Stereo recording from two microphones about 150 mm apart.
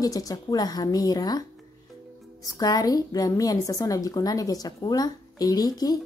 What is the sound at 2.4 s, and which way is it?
A woman's voice, 25° left (ahead or behind).